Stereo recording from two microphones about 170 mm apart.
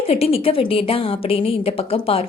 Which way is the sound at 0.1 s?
35° left (ahead or behind).